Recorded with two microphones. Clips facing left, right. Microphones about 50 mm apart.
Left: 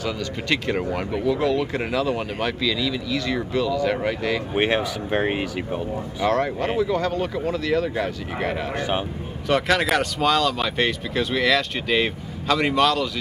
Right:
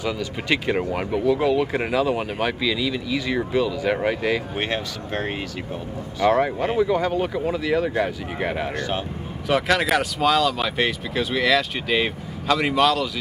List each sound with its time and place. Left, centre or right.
0.0 s speech: centre
4.6 s speech: centre
6.3 s speech: centre
8.7 s speech: centre
9.5 s speech: centre